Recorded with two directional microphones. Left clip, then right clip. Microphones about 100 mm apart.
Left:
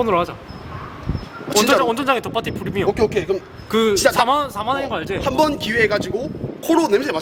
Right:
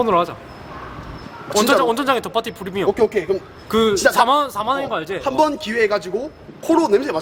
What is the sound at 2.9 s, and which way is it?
A man's voice, 5° left (ahead or behind).